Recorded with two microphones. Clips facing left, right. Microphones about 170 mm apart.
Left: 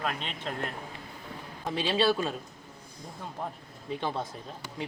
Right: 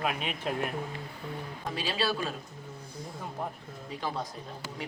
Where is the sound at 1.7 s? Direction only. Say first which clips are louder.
Left 5 dB; 25° left (ahead or behind).